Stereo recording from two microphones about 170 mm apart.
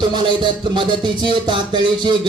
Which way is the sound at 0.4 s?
25° right (ahead or behind).